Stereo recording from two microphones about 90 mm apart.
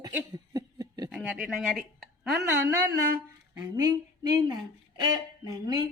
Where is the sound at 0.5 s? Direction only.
45° right (ahead or behind).